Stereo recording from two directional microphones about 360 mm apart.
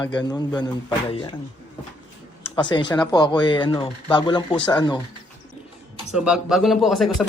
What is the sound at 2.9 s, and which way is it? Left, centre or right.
Speech, centre.